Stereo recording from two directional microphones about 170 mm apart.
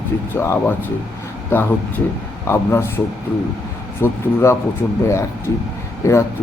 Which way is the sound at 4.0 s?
15° left (ahead or behind).